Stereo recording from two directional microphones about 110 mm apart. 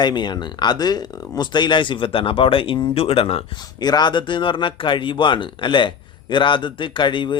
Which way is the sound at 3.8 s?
40° left (ahead or behind).